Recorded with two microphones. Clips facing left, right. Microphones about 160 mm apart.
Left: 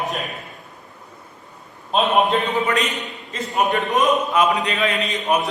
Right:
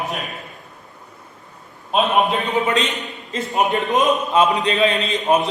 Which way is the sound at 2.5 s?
20° right (ahead or behind).